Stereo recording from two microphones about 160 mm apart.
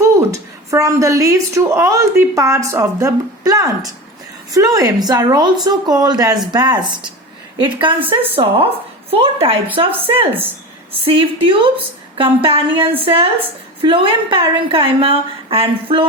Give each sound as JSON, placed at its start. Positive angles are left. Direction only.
{"t": 0.0, "sound": "a woman's voice", "side_deg": -20}
{"t": 7.9, "sound": "a woman's voice", "side_deg": -10}
{"t": 8.3, "sound": "a woman's voice", "side_deg": -35}